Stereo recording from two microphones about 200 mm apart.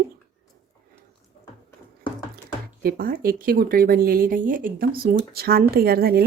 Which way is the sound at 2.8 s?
45° right (ahead or behind).